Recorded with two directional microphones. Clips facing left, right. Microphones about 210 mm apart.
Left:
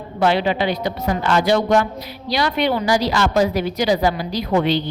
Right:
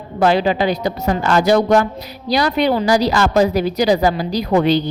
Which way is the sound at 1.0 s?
40° right (ahead or behind).